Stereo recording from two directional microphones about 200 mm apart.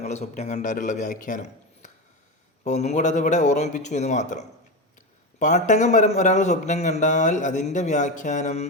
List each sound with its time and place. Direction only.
0.0 s a man's voice: 35° left (ahead or behind)